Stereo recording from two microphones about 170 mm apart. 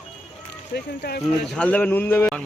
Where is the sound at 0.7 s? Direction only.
70° left (ahead or behind).